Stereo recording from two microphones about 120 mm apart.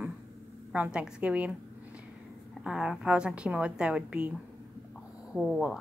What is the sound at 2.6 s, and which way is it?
A woman's voice, 5° right (ahead or behind).